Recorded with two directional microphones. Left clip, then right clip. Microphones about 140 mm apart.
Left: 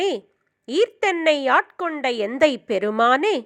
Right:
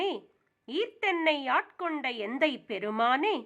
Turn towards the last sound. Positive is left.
turn(degrees=45)  # may be behind; listen again after turning